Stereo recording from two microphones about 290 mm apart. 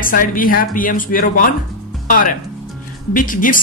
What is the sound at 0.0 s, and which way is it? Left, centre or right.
Speech, left.